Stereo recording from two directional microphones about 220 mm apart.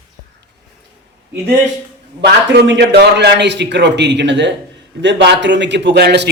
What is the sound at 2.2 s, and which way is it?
A man's voice, 50° right (ahead or behind).